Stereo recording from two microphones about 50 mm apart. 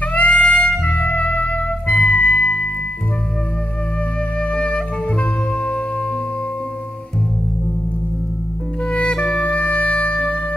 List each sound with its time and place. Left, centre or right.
0.0 s brass instrument: left
0.8 s music: left
4.4 s music: left
8.8 s music: left